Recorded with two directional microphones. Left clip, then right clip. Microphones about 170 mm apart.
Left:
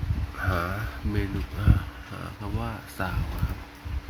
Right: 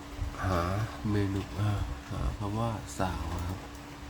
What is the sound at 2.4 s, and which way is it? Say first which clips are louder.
Speech: right 2 dB; 10° right (ahead or behind).